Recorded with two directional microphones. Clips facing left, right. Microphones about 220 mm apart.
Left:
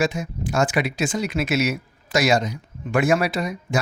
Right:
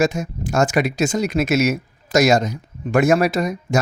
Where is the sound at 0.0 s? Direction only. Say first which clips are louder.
Right 4 dB; 45° right (ahead or behind).